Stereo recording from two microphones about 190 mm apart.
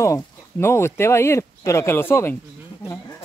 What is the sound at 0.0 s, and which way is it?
Speech, 15° left (ahead or behind).